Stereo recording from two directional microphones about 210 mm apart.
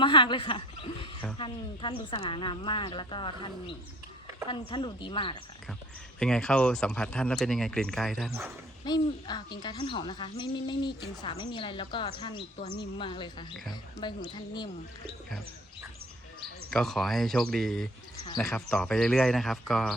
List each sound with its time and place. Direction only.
0.0 s a woman's voice: 25° left (ahead or behind)
4.7 s speech: 20° left (ahead or behind)
6.1 s speech: 5° left (ahead or behind)
8.8 s speech: 20° left (ahead or behind)
16.7 s speech: centre (ahead or behind)